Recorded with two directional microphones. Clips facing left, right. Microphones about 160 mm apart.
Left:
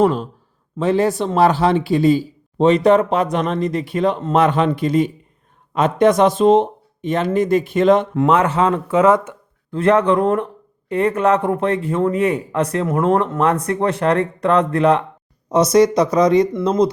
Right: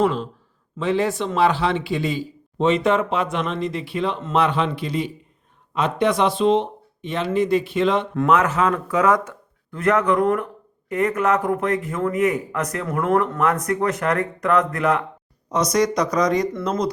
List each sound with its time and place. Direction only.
0.0 s speech: 40° left (ahead or behind)
8.3 s speech: 30° left (ahead or behind)